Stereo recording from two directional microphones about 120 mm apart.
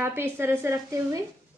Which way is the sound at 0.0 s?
20° right (ahead or behind).